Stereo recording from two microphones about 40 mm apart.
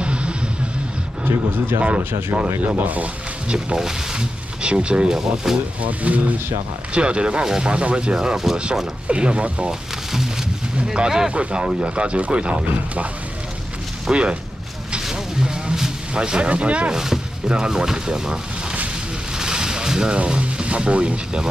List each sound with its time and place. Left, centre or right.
0.0 s vehicle: right
2.3 s speech: right
3.4 s speech: right
5.0 s speech: centre
5.8 s speech: right
6.9 s speech: right
9.7 s a sound: centre
11.0 s speech: centre
14.1 s speech: right
15.0 s a sound: centre
16.4 s speech: right
16.9 s speech: centre
19.3 s a sound: centre
20.2 s speech: right